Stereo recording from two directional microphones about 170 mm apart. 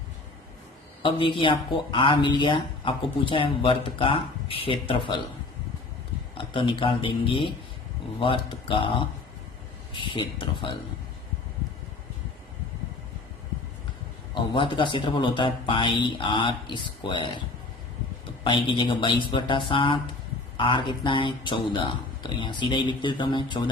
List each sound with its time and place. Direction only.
1.0 s speech: 30° left (ahead or behind)
6.3 s speech: 30° left (ahead or behind)
14.5 s speech: 30° left (ahead or behind)
18.4 s speech: 30° left (ahead or behind)